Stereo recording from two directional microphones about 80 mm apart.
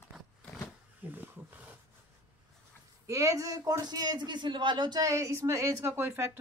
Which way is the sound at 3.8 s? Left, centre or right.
Right.